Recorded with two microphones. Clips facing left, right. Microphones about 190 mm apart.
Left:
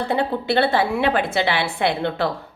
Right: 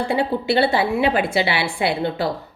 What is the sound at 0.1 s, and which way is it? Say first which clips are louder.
A woman's voice: even; 55° left (ahead or behind).